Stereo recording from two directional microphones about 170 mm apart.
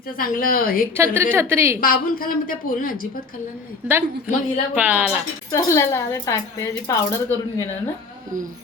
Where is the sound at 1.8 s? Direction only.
55° left (ahead or behind).